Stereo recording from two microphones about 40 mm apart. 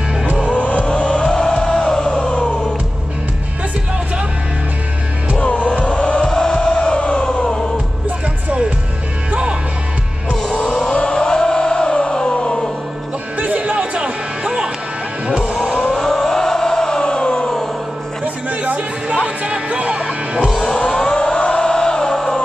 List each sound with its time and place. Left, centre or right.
0.5 s vehicle: left
1.6 s music: centre
5.4 s music: left
5.9 s chant: left
6.5 s music: left
10.8 s a sound: left
13.4 s music: right
15.9 s a sound: centre
18.2 s chatter: right
19.2 s music: right
20.3 s music: centre
21.0 s music: left